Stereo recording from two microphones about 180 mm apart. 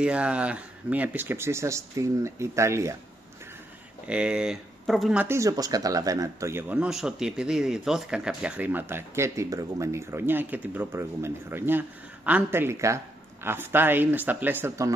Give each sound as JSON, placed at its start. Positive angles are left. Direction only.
{"t": 0.0, "sound": "speech", "side_deg": -5}
{"t": 4.1, "sound": "speech", "side_deg": -5}